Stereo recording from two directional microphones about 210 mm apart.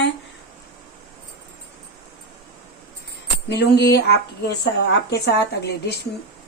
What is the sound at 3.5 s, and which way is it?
Speech, 50° left (ahead or behind).